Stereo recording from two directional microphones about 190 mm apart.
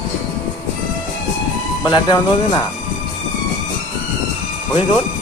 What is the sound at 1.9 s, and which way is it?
Speech, 25° left (ahead or behind).